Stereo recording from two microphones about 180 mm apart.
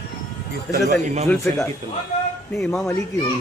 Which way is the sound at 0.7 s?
40° right (ahead or behind).